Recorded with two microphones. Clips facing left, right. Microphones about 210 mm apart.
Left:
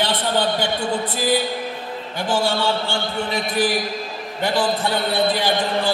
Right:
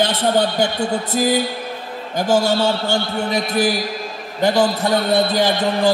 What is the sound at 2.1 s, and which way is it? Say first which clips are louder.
A man's voice: right 5 dB; 40° right (ahead or behind).